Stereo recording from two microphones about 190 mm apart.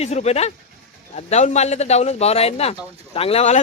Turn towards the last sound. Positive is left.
turn(degrees=35)  # may be behind; listen again after turning